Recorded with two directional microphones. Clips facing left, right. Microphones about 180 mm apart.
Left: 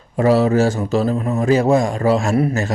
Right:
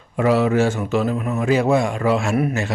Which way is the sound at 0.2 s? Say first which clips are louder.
Left 3 dB; 35° left (ahead or behind).